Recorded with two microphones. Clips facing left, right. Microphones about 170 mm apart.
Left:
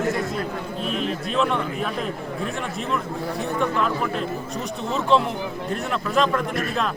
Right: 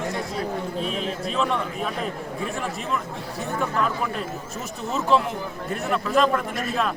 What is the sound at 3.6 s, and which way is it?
A man's voice, 5° right (ahead or behind).